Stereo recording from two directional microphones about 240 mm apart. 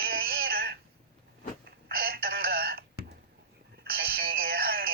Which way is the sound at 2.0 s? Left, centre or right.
Right.